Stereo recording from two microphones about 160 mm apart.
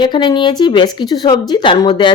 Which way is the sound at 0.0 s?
30° left (ahead or behind).